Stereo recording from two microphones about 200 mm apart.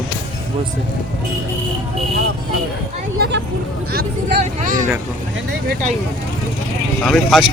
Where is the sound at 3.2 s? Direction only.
60° right (ahead or behind).